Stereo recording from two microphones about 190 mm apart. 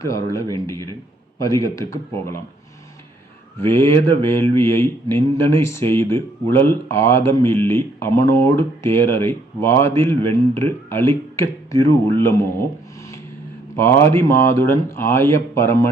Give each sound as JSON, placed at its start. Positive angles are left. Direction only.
{"t": 0.0, "sound": "speech", "side_deg": 15}
{"t": 3.6, "sound": "speech", "side_deg": 15}
{"t": 13.7, "sound": "speech", "side_deg": 15}